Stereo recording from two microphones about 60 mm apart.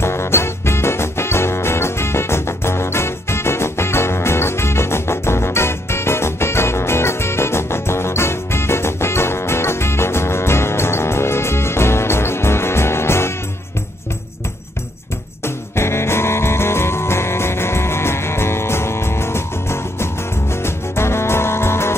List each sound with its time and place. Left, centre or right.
0.0 s music: left
15.4 s music: left